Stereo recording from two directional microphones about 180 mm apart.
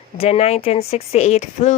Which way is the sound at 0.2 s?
35° left (ahead or behind).